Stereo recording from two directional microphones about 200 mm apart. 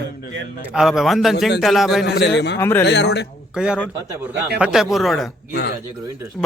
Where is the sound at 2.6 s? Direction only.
10° left (ahead or behind).